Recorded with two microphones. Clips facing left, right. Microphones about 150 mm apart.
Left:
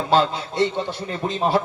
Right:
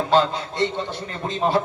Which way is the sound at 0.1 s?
20° right (ahead or behind).